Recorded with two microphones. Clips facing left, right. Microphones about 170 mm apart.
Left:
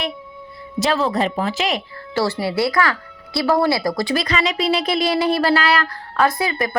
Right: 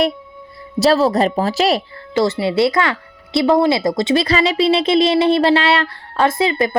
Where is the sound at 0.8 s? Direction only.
35° right (ahead or behind).